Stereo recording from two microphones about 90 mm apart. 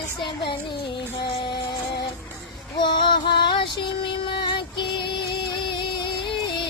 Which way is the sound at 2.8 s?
60° left (ahead or behind).